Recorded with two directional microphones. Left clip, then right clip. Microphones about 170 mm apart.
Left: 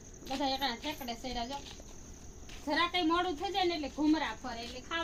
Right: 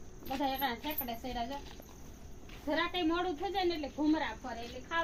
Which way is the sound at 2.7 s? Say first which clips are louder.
Left 2 dB; 65° left (ahead or behind).